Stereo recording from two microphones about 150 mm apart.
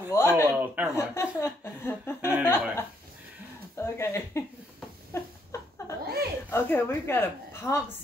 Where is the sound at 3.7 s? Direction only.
15° left (ahead or behind).